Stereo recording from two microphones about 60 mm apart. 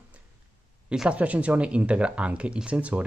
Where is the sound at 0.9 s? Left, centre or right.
Centre.